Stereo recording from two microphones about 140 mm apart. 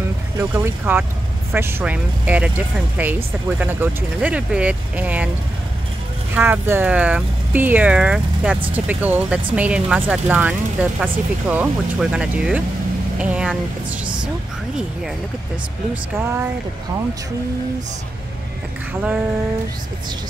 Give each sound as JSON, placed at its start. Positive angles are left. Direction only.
{"t": 0.4, "sound": "speech", "side_deg": -15}
{"t": 6.3, "sound": "speech", "side_deg": -15}
{"t": 15.9, "sound": "speech", "side_deg": -15}